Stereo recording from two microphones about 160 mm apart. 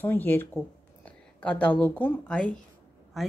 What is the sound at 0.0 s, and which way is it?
A woman's voice, 15° left (ahead or behind).